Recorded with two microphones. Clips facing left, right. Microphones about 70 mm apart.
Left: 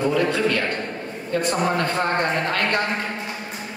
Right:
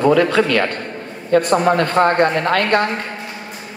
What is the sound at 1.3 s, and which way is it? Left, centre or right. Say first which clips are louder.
Speech: right 9 dB; right.